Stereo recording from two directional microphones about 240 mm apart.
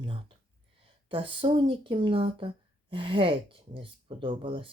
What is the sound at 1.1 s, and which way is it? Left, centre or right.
A woman's voice, right.